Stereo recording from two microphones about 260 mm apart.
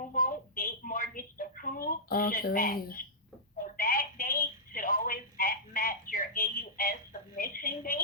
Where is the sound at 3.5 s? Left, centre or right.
Left.